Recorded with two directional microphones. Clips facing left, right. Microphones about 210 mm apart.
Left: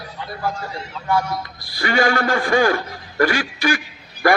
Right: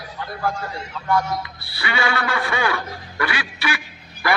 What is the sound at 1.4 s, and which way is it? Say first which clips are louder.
A man's voice: left 5 dB; 40° left (ahead or behind).